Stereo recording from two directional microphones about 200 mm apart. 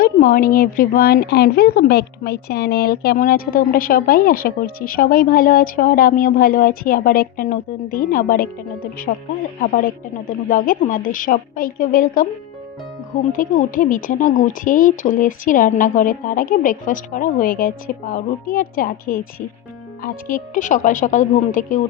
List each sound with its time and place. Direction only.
0.0 s a woman's voice: 45° left (ahead or behind)
13.3 s a woman's voice: 40° left (ahead or behind)